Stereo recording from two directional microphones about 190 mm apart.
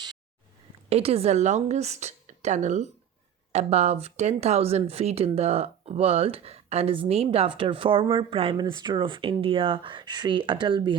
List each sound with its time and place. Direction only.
0.9 s a woman's voice: 30° right (ahead or behind)